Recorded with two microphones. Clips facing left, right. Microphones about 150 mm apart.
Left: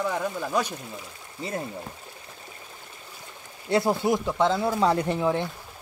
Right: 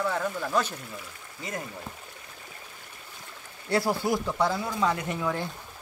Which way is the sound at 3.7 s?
20° left (ahead or behind).